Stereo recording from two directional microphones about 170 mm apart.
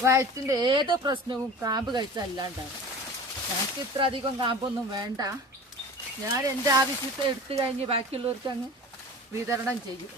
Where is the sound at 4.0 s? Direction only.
30° right (ahead or behind).